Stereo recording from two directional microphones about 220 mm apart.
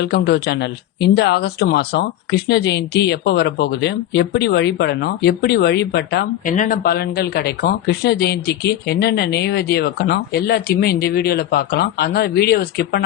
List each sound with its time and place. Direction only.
0.0 s speech: 50° left (ahead or behind)